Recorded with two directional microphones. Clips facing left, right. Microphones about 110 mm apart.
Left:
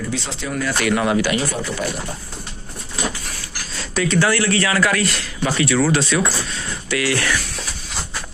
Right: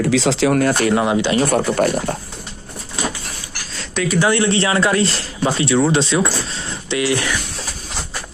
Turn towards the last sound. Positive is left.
turn(degrees=-20)  # may be behind; listen again after turning